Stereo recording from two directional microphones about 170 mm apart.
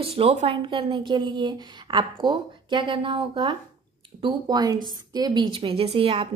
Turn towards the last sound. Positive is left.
turn(degrees=-35)  # may be behind; listen again after turning